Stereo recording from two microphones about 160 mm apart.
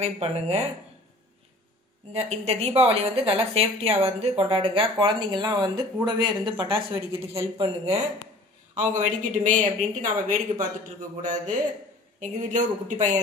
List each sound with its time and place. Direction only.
0.0 s a woman's voice: 40° right (ahead or behind)
2.1 s a woman's voice: 40° right (ahead or behind)
6.9 s a woman's voice: 15° right (ahead or behind)
7.5 s a woman's voice: 40° right (ahead or behind)
8.7 s speech: 50° right (ahead or behind)